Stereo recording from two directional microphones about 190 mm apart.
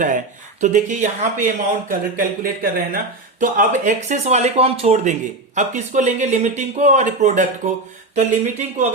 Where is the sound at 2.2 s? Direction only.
50° right (ahead or behind).